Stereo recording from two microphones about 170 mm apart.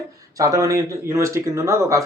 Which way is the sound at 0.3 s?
20° right (ahead or behind).